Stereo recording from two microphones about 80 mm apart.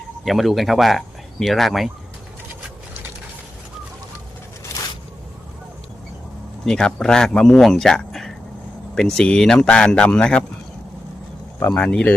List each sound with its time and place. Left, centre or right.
0.3 s speech: centre
6.7 s speech: centre
11.7 s speech: centre